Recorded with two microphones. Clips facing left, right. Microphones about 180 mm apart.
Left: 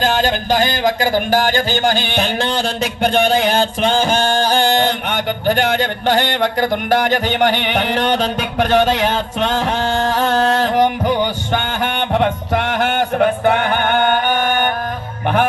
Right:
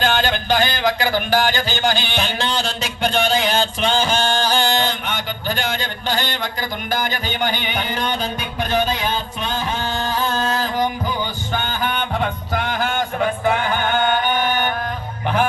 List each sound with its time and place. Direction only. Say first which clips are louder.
0.0 s speech: left 3 dB; 40° left (ahead or behind)